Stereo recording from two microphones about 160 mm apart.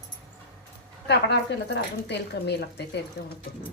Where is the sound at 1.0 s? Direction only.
90° left.